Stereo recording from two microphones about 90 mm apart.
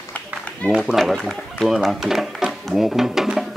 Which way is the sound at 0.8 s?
Centre (ahead or behind).